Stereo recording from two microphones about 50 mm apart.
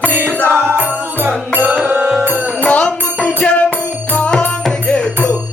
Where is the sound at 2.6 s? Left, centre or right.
Left.